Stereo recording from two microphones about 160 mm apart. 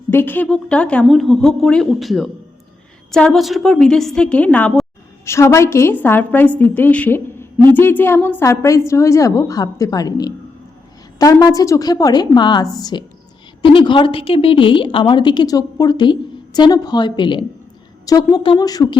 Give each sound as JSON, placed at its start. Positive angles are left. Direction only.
{"t": 0.1, "sound": "a woman's voice", "side_deg": 10}